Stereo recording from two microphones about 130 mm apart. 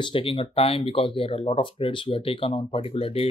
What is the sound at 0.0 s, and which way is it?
Speech, 45° left (ahead or behind).